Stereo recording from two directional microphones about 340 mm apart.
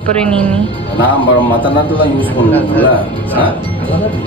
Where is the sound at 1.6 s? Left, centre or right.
Centre.